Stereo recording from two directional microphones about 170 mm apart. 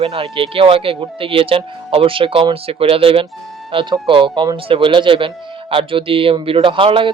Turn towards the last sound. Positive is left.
turn(degrees=-30)  # may be behind; listen again after turning